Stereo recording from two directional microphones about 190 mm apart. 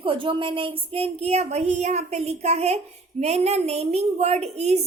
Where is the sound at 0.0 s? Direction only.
25° right (ahead or behind).